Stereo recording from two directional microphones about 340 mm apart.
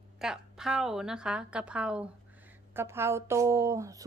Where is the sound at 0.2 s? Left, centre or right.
Centre.